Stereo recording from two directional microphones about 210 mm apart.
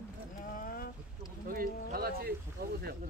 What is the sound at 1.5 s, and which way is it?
Speech, 45° right (ahead or behind).